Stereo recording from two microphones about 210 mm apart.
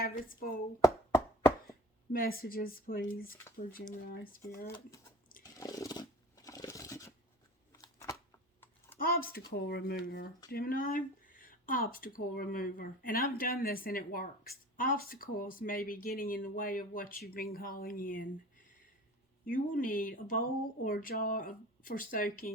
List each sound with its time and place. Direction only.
0.3 s speech: 45° left (ahead or behind)
1.1 s a sound: 10° left (ahead or behind)
2.1 s speech: 45° left (ahead or behind)
5.4 s a sound: 15° left (ahead or behind)
9.0 s speech: 45° left (ahead or behind)
19.5 s speech: 40° left (ahead or behind)